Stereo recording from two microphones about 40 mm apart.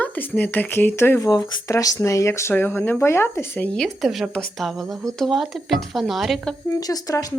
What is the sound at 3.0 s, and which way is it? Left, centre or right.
Speech, left.